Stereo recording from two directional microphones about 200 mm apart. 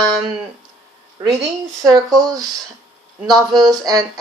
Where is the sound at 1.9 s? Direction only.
20° right (ahead or behind).